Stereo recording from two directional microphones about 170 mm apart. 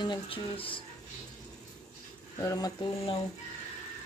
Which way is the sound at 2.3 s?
20° left (ahead or behind).